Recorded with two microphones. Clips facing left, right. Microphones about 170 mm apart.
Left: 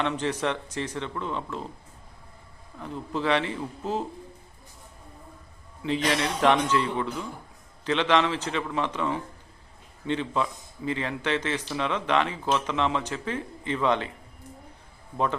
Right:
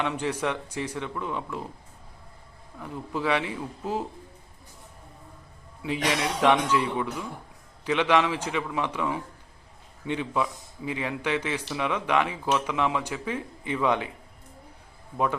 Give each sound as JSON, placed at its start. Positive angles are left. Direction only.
{"t": 0.0, "sound": "speech", "side_deg": -10}
{"t": 2.8, "sound": "speech", "side_deg": -10}
{"t": 6.1, "sound": "speech", "side_deg": -10}